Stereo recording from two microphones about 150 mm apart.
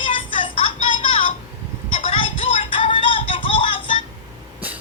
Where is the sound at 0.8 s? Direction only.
35° left (ahead or behind).